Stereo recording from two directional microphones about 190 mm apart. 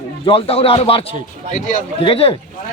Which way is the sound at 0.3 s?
30° left (ahead or behind).